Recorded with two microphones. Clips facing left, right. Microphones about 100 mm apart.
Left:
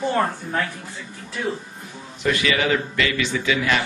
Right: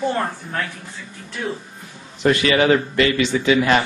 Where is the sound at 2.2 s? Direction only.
40° right (ahead or behind).